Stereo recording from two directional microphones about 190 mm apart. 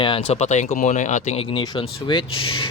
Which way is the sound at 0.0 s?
30° left (ahead or behind).